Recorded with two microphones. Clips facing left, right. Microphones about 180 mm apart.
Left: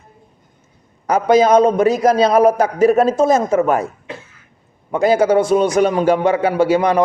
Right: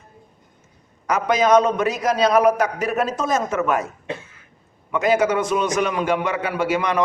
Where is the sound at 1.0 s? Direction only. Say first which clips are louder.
Left 6 dB; 30° left (ahead or behind).